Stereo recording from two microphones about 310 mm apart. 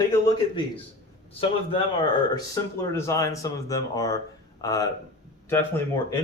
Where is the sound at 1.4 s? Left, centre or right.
Centre.